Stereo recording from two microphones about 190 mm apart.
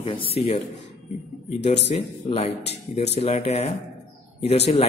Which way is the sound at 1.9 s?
30° left (ahead or behind).